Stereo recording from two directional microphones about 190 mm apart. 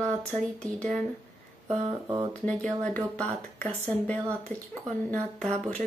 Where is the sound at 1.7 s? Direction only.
30° right (ahead or behind).